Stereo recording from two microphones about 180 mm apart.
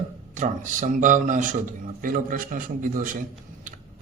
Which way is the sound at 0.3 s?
45° right (ahead or behind).